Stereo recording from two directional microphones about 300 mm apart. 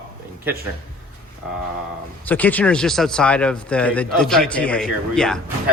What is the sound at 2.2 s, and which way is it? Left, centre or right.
Speech, centre.